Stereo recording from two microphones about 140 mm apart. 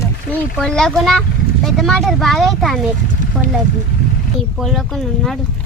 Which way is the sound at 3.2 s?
70° right (ahead or behind).